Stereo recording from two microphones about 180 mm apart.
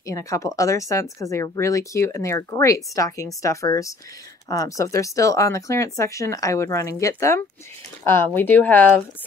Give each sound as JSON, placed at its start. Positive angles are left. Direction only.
{"t": 0.0, "sound": "speech", "side_deg": 20}